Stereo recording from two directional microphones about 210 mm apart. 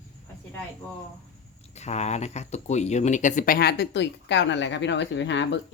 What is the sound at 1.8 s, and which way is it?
Speech, 30° left (ahead or behind).